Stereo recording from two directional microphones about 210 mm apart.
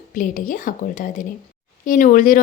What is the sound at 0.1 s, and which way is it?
Speech, 40° left (ahead or behind).